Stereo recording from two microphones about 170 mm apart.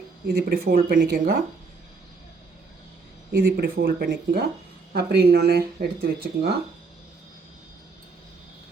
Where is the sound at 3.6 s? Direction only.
60° right (ahead or behind).